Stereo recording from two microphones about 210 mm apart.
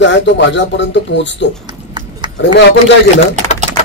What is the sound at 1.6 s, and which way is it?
Horse, 20° right (ahead or behind).